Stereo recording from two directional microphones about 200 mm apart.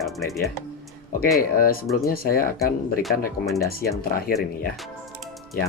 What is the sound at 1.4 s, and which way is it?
Speech, 45° left (ahead or behind).